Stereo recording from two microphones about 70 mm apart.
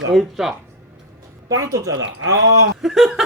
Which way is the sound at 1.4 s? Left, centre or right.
Right.